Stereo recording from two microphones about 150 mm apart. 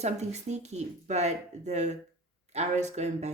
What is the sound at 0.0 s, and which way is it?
A woman's voice, 50° right (ahead or behind).